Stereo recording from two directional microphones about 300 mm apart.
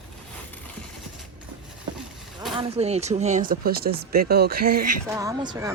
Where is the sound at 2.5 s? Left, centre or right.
Centre.